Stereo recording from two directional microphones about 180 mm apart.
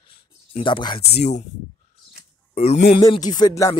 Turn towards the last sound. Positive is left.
turn(degrees=20)  # may be behind; listen again after turning